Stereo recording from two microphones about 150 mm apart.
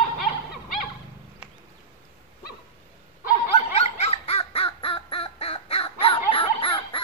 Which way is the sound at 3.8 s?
45° left (ahead or behind).